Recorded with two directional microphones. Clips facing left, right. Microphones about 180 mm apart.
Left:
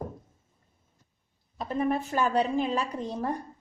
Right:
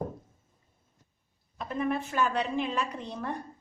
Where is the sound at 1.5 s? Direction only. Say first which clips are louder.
Left 3 dB; 35° left (ahead or behind).